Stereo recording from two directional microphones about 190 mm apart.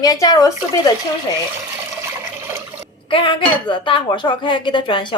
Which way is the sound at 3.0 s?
25° left (ahead or behind).